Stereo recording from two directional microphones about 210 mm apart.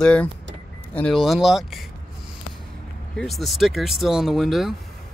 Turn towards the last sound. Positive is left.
turn(degrees=0)  # may be behind; listen again after turning